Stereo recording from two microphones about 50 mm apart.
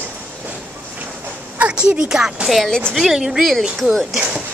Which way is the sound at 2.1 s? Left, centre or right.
Centre.